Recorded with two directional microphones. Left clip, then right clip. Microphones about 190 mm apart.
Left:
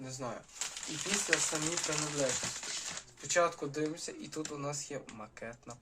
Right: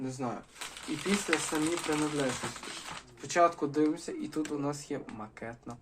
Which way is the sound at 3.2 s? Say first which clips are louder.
Right 4 dB; 30° right (ahead or behind).